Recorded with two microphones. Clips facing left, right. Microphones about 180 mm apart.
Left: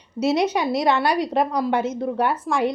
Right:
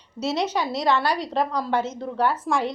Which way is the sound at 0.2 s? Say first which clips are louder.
Left 6 dB; 35° left (ahead or behind).